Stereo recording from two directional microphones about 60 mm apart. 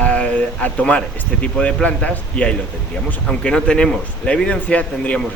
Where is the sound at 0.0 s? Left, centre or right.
Left.